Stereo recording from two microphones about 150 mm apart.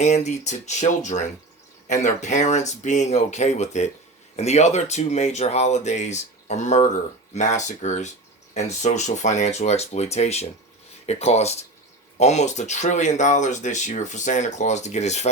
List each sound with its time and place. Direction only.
0.0 s speech: 50° left (ahead or behind)